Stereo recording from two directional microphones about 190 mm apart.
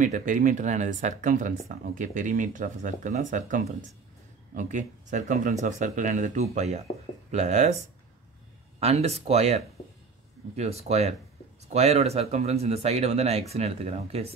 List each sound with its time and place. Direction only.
0.0 s speech: 40° right (ahead or behind)
8.7 s speech: 35° right (ahead or behind)